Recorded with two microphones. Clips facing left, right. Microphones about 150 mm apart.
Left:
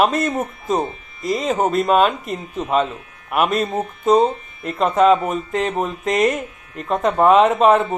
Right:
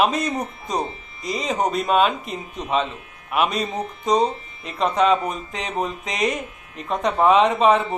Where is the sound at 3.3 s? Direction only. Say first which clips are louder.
Left 3 dB; 45° left (ahead or behind).